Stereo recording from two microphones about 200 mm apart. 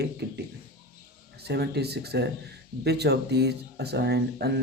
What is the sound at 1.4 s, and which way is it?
A man's voice, 55° right (ahead or behind).